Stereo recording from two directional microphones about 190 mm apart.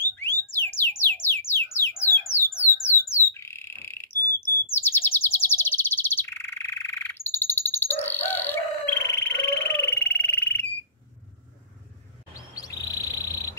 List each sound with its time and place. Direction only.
0.0 s music: 10° left (ahead or behind)
2.8 s a sound: 15° left (ahead or behind)
4.7 s chirp: 10° left (ahead or behind)
12.4 s chirp: 20° left (ahead or behind)